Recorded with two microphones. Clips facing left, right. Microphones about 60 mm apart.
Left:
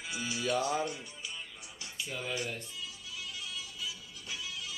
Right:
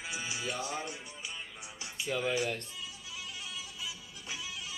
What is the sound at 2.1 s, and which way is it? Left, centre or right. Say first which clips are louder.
Speech: right 5 dB; right.